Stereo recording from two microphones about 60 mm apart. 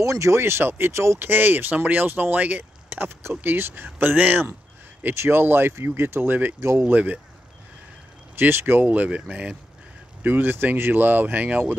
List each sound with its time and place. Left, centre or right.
0.0 s speech: right
0.4 s speech: right
1.2 s speech: right
2.9 s speech: right
5.1 s speech: right
6.3 s speech: right
8.4 s speech: right; by 9.6 s centre
10.2 s speech: right